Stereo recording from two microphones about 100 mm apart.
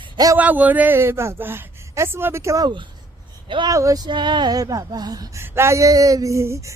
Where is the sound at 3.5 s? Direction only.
55° right (ahead or behind).